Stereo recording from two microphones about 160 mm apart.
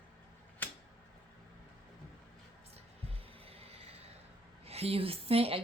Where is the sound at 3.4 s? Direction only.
40° right (ahead or behind).